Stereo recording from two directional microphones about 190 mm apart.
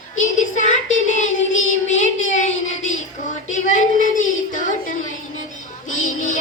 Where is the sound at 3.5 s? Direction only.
40° left (ahead or behind).